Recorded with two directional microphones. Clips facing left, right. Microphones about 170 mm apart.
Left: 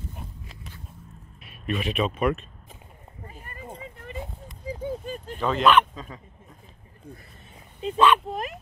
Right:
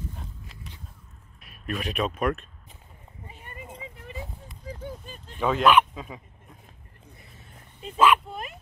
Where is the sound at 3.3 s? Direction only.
40° left (ahead or behind).